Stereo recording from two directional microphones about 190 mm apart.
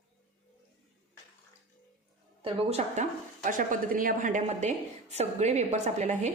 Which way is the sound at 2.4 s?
30° right (ahead or behind).